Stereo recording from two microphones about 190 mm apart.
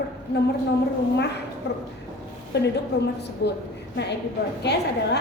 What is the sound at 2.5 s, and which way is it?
A woman's voice, 60° left (ahead or behind).